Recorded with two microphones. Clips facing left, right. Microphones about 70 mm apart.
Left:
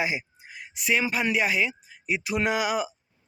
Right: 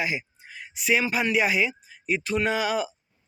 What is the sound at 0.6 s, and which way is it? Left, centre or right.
A man's voice, centre.